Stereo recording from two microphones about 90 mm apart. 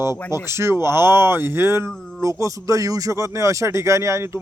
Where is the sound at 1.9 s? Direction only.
5° left (ahead or behind).